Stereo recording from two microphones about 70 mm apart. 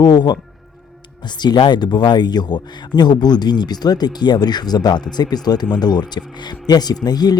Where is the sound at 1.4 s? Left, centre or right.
Left.